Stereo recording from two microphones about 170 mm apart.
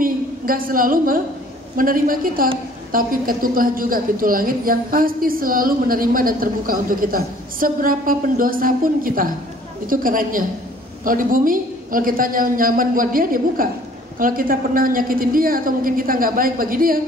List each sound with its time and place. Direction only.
0.0 s a woman's voice: 55° right (ahead or behind)